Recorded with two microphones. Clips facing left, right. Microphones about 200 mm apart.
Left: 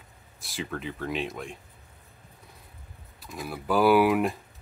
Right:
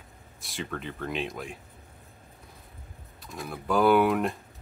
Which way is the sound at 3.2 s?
Centre (ahead or behind).